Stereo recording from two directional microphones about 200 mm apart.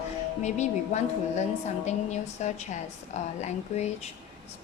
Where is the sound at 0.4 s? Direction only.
35° left (ahead or behind).